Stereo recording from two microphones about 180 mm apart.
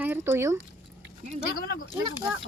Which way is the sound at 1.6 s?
55° left (ahead or behind).